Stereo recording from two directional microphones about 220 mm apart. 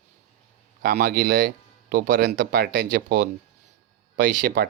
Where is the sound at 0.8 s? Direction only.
40° right (ahead or behind).